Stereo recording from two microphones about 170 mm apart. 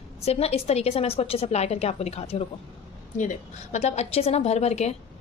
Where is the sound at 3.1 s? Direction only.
45° left (ahead or behind).